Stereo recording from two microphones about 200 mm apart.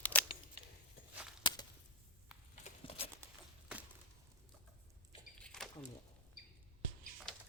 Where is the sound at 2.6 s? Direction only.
30° left (ahead or behind).